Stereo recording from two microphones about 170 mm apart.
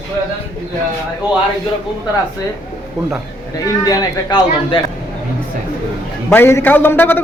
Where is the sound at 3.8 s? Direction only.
25° left (ahead or behind).